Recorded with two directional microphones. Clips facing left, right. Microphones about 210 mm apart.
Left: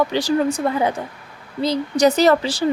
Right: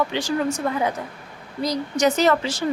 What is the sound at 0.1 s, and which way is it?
A woman's voice, 35° left (ahead or behind).